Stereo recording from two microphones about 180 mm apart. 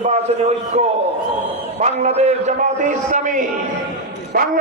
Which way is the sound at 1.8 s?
40° right (ahead or behind).